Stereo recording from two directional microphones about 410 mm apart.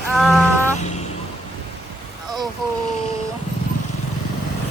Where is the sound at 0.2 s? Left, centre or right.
Centre.